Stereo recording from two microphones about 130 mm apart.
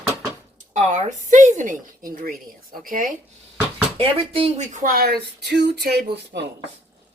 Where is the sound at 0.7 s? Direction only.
70° right (ahead or behind); by 3.1 s 90° right.